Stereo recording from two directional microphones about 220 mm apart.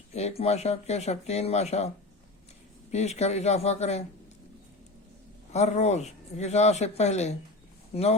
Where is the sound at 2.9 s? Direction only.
30° left (ahead or behind).